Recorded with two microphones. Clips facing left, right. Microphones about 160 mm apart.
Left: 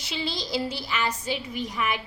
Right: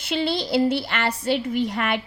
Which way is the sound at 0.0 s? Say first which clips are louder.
Right 8 dB; 60° right (ahead or behind).